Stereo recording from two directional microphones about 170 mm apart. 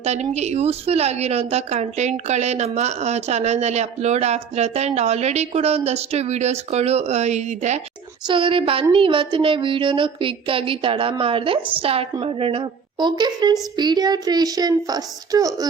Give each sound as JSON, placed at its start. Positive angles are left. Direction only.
{"t": 0.0, "sound": "a woman's voice", "side_deg": -40}
{"t": 8.3, "sound": "a woman's voice", "side_deg": -30}